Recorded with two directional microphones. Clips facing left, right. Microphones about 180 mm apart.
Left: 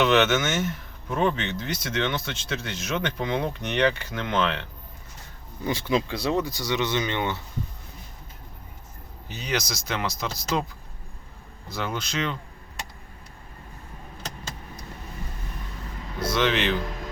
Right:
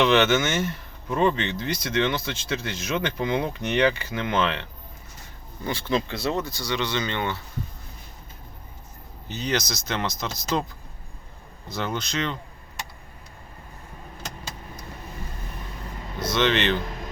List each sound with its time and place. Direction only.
0.0 s speech: centre (ahead or behind)
5.6 s speech: 15° left (ahead or behind)
9.3 s speech: 10° left (ahead or behind)
11.7 s speech: 5° left (ahead or behind)
16.2 s speech: 5° left (ahead or behind)